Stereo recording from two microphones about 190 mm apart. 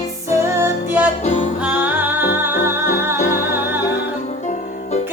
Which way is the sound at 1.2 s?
35° left (ahead or behind).